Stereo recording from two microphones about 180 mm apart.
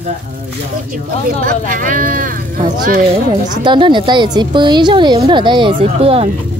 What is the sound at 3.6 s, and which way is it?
Speech, 25° right (ahead or behind).